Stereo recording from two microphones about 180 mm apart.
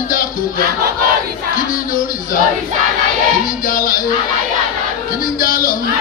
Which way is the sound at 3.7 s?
50° left (ahead or behind).